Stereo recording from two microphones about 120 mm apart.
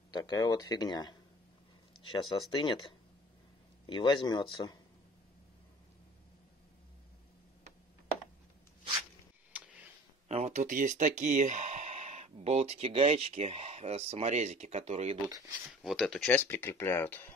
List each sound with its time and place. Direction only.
0.1 s speech: 35° left (ahead or behind)
10.2 s speech: 65° right (ahead or behind)
15.7 s speech: centre (ahead or behind)
16.3 s speech: 15° left (ahead or behind)